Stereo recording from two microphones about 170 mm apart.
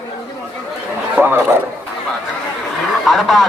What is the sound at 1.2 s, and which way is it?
Speech, 15° right (ahead or behind).